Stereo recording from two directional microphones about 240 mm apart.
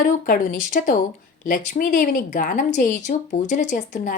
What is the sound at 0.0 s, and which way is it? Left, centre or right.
Speech, left.